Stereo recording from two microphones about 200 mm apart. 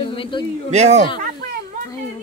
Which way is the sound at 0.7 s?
35° right (ahead or behind).